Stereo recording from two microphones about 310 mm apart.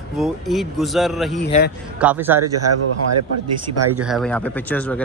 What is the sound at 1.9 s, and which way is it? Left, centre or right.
Speech, centre.